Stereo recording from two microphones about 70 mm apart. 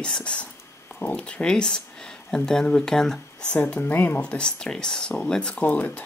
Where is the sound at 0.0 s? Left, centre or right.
Centre.